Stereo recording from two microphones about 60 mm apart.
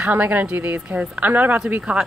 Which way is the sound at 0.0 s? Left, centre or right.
Right.